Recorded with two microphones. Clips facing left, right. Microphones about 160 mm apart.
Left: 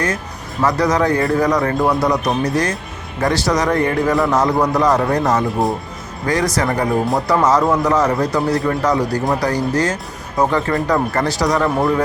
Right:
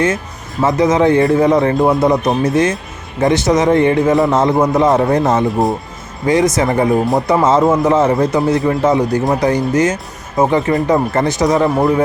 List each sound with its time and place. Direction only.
0.6 s speech: 25° right (ahead or behind)
5.5 s speech: centre (ahead or behind)
6.2 s speech: 20° right (ahead or behind)